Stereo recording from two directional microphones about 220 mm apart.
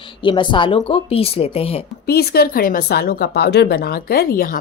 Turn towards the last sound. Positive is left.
turn(degrees=40)  # may be behind; listen again after turning